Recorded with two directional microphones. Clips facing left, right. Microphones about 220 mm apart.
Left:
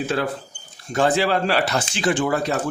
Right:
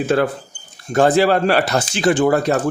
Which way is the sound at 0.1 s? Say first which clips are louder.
Right 7 dB; 55° right (ahead or behind).